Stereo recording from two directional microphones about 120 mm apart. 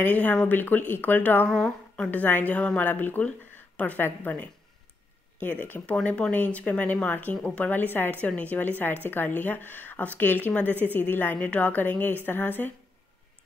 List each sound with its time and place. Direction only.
0.0 s speech: 15° left (ahead or behind)
1.5 s a woman's voice: 5° left (ahead or behind)
2.0 s speech: 15° left (ahead or behind)